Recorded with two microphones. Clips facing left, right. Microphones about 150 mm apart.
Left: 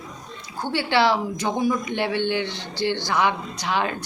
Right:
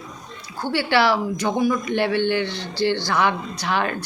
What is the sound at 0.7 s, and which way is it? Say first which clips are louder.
A woman's voice: right 1 dB; 20° left (ahead or behind).